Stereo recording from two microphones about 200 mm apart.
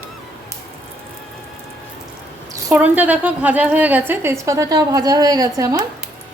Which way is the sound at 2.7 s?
10° right (ahead or behind).